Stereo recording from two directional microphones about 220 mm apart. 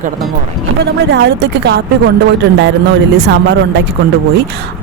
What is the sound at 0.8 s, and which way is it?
Speech, 50° right (ahead or behind).